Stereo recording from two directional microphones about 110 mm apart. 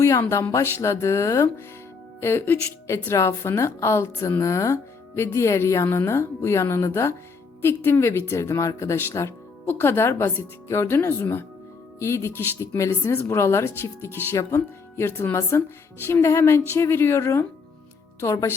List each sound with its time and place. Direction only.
0.0 s speech: 25° left (ahead or behind)